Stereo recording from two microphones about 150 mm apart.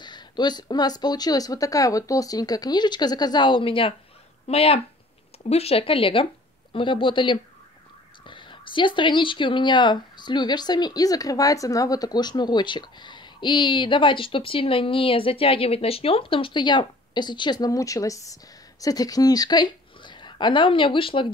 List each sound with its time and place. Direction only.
0.0 s speech: 30° left (ahead or behind)